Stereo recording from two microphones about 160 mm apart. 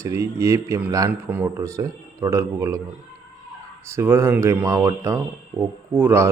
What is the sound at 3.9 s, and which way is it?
Speech, 15° right (ahead or behind).